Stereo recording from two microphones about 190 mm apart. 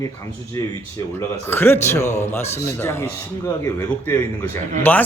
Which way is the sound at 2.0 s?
35° left (ahead or behind).